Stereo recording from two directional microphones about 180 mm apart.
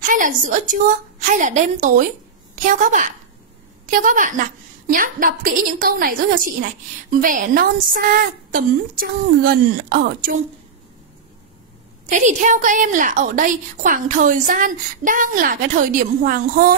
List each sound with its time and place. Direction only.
0.1 s a woman's voice: 50° right (ahead or behind)
12.1 s a woman's voice: 45° right (ahead or behind)